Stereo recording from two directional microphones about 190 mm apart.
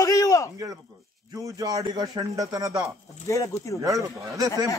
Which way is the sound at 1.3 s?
20° right (ahead or behind).